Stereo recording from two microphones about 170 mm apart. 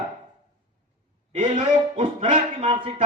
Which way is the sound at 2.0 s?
30° right (ahead or behind).